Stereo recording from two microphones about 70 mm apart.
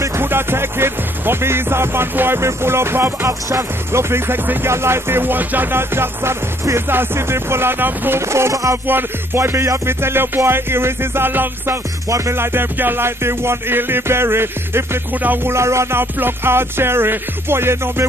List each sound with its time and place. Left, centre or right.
0.2 s music: right
8.3 s a sound: right
8.8 s music: right